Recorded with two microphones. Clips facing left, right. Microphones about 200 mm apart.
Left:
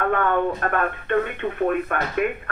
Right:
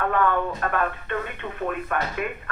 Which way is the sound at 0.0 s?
55° left (ahead or behind).